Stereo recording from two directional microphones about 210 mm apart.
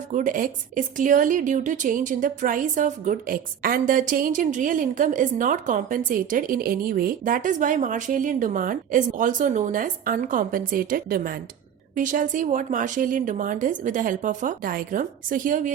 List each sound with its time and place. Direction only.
0.1 s a woman's voice: 40° right (ahead or behind)